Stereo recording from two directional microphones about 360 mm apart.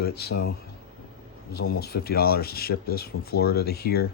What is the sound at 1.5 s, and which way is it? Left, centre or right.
Speech, left.